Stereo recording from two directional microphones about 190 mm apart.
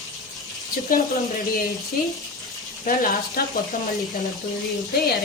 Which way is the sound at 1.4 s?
50° left (ahead or behind).